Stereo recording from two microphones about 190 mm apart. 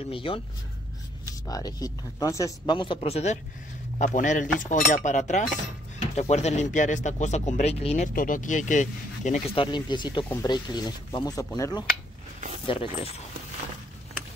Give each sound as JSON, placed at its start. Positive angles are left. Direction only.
{"t": 0.1, "sound": "speech", "side_deg": 30}
{"t": 1.5, "sound": "speech", "side_deg": 20}